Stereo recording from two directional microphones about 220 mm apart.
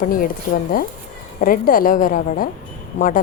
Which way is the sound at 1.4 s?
40° left (ahead or behind).